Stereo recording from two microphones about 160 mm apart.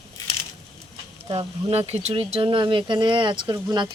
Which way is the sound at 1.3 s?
40° right (ahead or behind).